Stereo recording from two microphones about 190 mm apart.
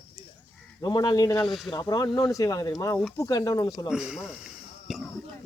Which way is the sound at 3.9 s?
5° right (ahead or behind).